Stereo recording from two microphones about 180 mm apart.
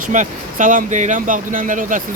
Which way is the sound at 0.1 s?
45° right (ahead or behind).